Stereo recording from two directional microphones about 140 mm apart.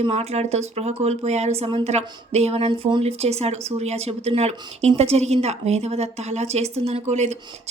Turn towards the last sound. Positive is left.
turn(degrees=-50)  # may be behind; listen again after turning